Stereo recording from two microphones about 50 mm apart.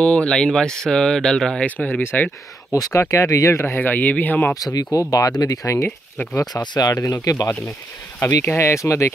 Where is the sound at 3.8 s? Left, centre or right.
Left.